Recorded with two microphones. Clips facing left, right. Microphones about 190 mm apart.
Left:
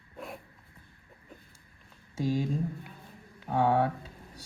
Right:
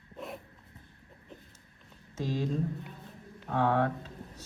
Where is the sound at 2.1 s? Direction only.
10° left (ahead or behind).